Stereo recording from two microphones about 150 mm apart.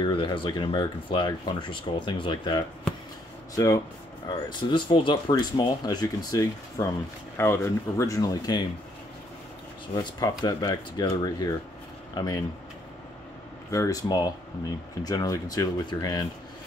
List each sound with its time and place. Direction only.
0.0 s speech: 35° left (ahead or behind)
3.5 s speech: 20° left (ahead or behind)
10.4 s speech: 30° left (ahead or behind)
13.7 s speech: 20° left (ahead or behind)